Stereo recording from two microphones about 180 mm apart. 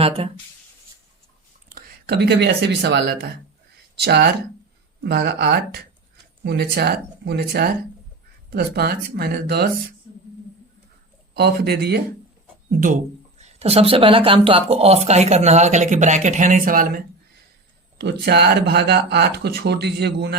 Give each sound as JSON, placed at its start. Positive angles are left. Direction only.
{"t": 1.7, "sound": "speech", "side_deg": -60}
{"t": 11.3, "sound": "speech", "side_deg": -65}
{"t": 13.4, "sound": "speech", "side_deg": -35}
{"t": 17.9, "sound": "speech", "side_deg": -65}